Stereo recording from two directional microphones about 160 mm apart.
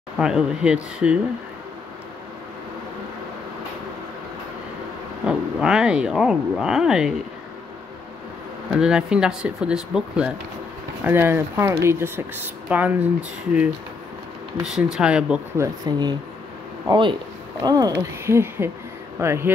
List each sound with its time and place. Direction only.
0.2 s speech: 5° right (ahead or behind)
5.2 s speech: 5° right (ahead or behind)
8.7 s speech: 5° right (ahead or behind)
11.1 s speech: 15° right (ahead or behind)
14.6 s speech: 5° right (ahead or behind)
15.5 s speech: 20° right (ahead or behind)